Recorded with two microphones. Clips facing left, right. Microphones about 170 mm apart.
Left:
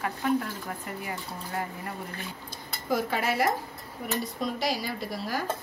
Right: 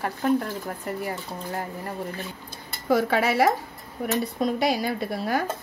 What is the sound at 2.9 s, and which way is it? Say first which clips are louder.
Speech: right 6 dB; 70° right (ahead or behind).